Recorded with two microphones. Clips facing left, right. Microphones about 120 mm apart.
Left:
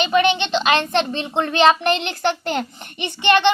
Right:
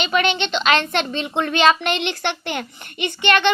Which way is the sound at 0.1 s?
30° left (ahead or behind).